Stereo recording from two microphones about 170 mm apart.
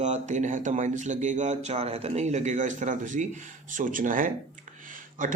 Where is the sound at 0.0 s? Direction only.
45° right (ahead or behind).